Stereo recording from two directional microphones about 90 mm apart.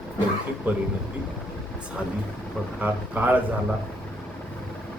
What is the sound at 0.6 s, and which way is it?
Speech, 20° right (ahead or behind).